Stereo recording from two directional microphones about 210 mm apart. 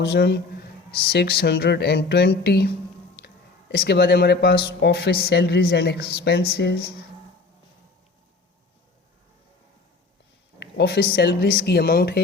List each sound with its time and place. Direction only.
0.0 s speech: 50° left (ahead or behind)
10.6 s speech: 50° left (ahead or behind)